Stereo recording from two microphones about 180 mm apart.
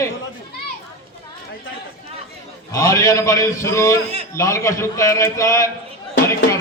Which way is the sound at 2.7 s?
15° left (ahead or behind).